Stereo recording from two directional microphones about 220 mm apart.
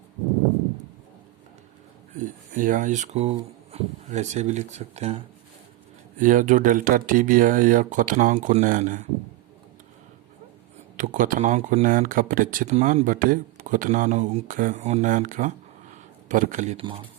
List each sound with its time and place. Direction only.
2.1 s speech: 35° right (ahead or behind)
10.9 s speech: 35° right (ahead or behind)